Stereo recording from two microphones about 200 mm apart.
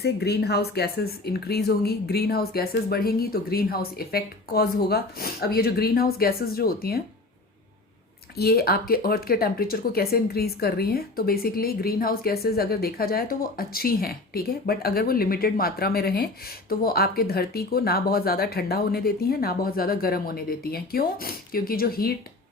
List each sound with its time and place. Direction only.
0.0 s speech: 55° left (ahead or behind)
8.4 s speech: 50° left (ahead or behind)